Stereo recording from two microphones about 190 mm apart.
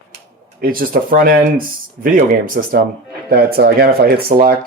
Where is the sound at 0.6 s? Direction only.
50° right (ahead or behind).